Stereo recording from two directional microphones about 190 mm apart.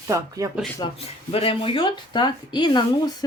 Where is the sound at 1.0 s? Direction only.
30° left (ahead or behind).